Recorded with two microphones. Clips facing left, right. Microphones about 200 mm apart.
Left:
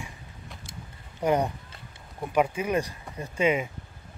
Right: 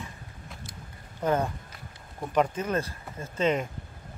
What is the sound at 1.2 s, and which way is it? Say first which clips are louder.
Speech: left 2 dB; 15° left (ahead or behind).